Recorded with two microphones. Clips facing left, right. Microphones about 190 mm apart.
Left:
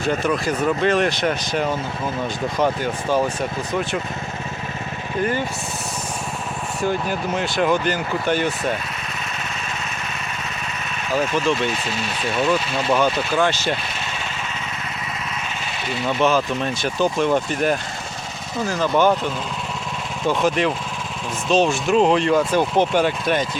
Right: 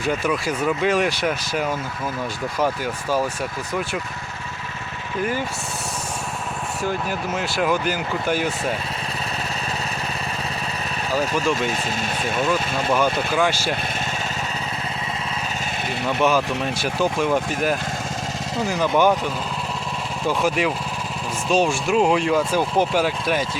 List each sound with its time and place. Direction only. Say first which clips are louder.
0.0 s speech: left 2 dB; 10° right (ahead or behind)
6.8 s speech: left 3 dB; 5° right (ahead or behind)
11.5 s speech: left 1 dB; 45° right (ahead or behind)
13.1 s speech: left 1 dB; 10° right (ahead or behind)
16.2 s speech: left 1 dB; 10° right (ahead or behind)